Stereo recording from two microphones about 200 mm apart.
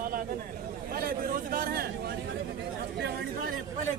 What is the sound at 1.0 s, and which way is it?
Speech, 45° right (ahead or behind).